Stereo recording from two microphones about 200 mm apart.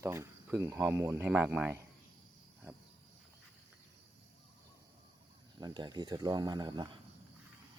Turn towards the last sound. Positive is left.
turn(degrees=-20)  # may be behind; listen again after turning